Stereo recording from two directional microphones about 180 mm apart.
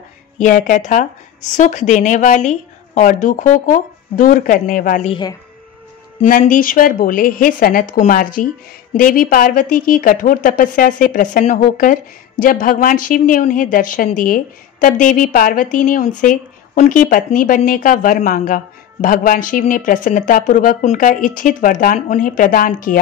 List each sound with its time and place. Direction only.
0.4 s a woman's voice: 45° left (ahead or behind)
6.2 s a woman's voice: 45° left (ahead or behind)